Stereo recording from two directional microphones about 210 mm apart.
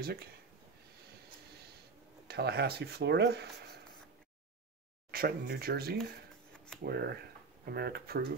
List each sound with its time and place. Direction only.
0.0 s speech: 45° right (ahead or behind)
2.2 s speech: 50° right (ahead or behind)
5.1 s speech: 45° right (ahead or behind)